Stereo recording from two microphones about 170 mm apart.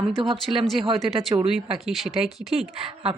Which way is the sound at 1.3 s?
35° right (ahead or behind).